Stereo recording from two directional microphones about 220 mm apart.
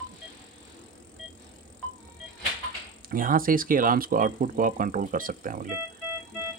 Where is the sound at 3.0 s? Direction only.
40° right (ahead or behind).